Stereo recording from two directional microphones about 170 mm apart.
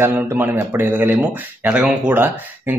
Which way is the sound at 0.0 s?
10° right (ahead or behind).